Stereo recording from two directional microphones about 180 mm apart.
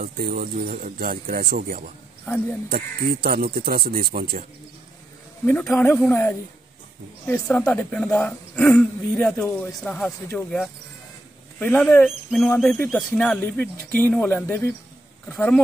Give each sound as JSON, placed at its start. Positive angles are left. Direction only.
{"t": 0.0, "sound": "speech", "side_deg": -55}
{"t": 5.5, "sound": "speech", "side_deg": 5}
{"t": 11.6, "sound": "speech", "side_deg": 10}